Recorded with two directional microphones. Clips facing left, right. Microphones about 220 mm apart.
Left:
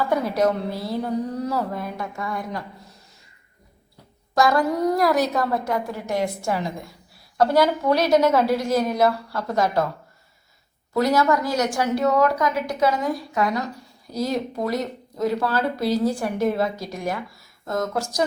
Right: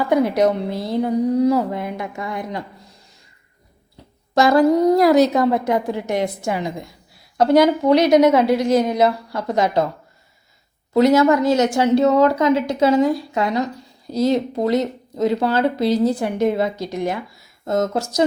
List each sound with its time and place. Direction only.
0.1 s speech: 15° right (ahead or behind)
4.4 s speech: 25° right (ahead or behind)
10.9 s speech: 20° right (ahead or behind)